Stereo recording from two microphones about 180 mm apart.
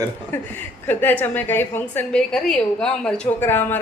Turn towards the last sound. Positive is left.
turn(degrees=10)  # may be behind; listen again after turning